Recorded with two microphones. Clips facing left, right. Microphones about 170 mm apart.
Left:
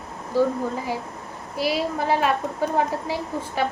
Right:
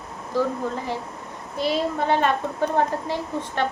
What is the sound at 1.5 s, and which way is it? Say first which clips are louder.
Speech: even; 5° left (ahead or behind).